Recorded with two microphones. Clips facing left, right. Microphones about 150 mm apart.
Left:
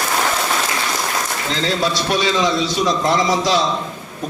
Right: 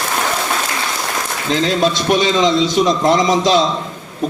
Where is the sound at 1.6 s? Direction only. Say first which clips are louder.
Right 4 dB; 20° right (ahead or behind).